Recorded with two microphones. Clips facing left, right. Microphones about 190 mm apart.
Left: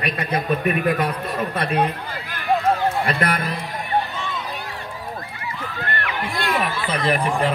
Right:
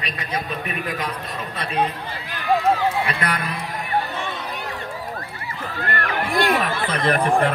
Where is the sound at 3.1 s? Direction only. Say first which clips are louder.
Left 3 dB; 50° left (ahead or behind).